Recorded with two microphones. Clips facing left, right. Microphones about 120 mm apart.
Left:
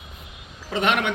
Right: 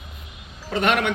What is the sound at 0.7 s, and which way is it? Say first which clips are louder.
Speech: right 1 dB; 15° left (ahead or behind).